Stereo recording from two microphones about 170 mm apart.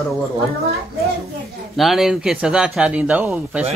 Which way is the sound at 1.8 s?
Centre (ahead or behind).